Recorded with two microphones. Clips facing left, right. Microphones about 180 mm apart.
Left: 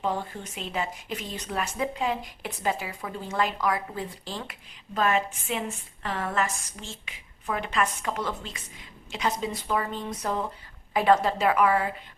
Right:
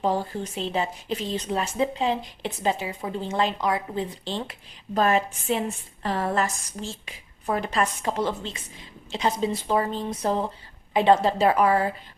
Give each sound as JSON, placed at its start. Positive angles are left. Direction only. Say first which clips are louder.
{"t": 0.0, "sound": "speech", "louder": "right 5 dB", "side_deg": -35}
{"t": 4.9, "sound": "a woman's voice", "louder": "right 3 dB", "side_deg": -35}